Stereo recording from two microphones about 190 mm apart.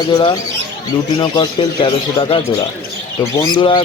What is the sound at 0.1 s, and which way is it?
Speech, 25° left (ahead or behind).